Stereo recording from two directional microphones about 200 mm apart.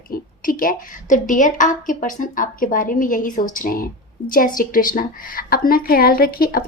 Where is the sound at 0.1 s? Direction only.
45° left (ahead or behind).